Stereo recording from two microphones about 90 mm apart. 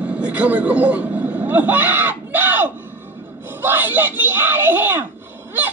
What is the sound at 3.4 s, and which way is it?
Laughter, 20° right (ahead or behind).